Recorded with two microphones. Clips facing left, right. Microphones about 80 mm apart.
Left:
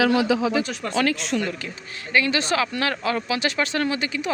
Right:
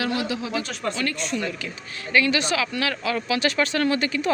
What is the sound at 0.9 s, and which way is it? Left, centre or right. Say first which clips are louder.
Speech: left 6 dB; left.